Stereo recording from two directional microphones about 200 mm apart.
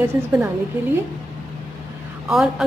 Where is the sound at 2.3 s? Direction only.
5° right (ahead or behind).